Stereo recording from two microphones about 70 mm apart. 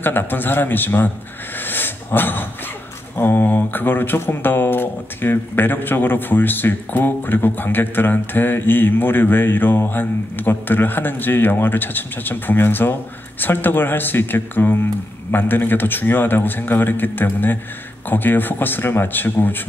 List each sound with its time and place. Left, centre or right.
0.0 s a man's voice: left